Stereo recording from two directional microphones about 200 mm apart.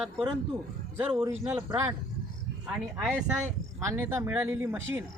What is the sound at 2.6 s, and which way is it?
Speech, 5° right (ahead or behind).